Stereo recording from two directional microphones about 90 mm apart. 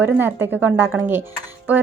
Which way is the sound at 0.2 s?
25° right (ahead or behind).